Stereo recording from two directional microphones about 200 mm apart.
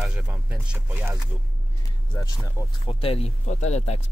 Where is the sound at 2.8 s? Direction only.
30° left (ahead or behind).